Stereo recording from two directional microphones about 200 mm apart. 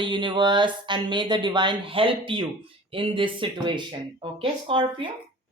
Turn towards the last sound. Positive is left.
turn(degrees=-25)  # may be behind; listen again after turning